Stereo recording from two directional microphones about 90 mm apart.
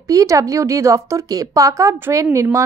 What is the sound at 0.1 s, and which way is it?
Speech, 40° right (ahead or behind).